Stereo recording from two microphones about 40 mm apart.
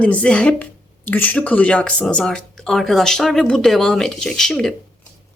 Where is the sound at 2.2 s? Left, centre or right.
Left.